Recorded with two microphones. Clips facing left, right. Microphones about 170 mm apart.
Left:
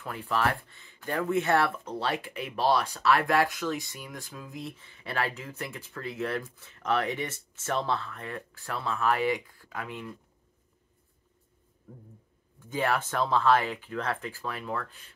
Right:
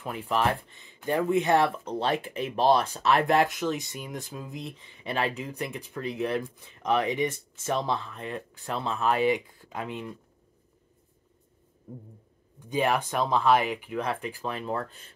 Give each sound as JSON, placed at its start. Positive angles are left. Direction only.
{"t": 0.0, "sound": "speech", "side_deg": -20}
{"t": 11.9, "sound": "speech", "side_deg": -20}